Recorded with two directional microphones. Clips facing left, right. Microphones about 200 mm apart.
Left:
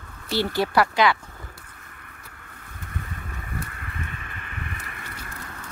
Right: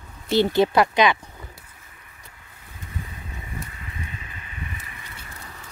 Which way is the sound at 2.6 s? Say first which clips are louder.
Even; 60° left (ahead or behind).